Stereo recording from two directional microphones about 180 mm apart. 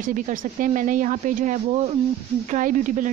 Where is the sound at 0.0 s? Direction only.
50° right (ahead or behind).